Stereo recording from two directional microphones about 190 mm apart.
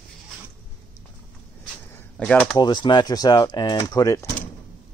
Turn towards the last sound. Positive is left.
turn(degrees=20)  # may be behind; listen again after turning